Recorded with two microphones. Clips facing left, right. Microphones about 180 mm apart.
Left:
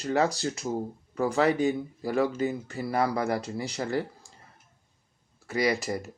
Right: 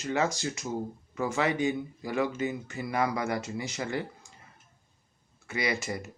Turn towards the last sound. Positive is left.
turn(degrees=40)  # may be behind; listen again after turning